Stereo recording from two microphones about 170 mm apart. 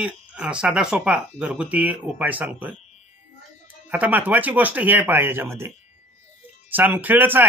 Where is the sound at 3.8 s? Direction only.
10° right (ahead or behind).